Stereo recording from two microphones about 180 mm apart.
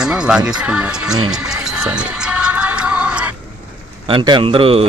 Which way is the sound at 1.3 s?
5° right (ahead or behind).